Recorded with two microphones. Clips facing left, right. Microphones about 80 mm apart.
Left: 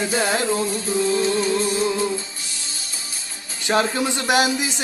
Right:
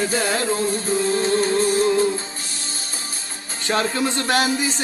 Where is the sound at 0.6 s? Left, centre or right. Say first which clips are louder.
Right 1 dB; right.